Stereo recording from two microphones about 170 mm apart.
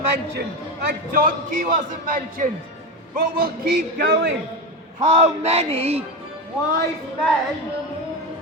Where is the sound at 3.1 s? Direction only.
60° right (ahead or behind).